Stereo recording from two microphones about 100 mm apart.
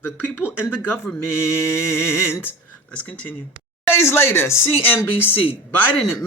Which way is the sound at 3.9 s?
25° left (ahead or behind).